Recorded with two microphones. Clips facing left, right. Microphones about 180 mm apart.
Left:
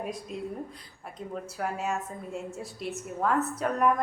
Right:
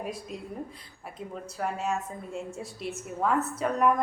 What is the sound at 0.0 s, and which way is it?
A woman's voice, centre (ahead or behind).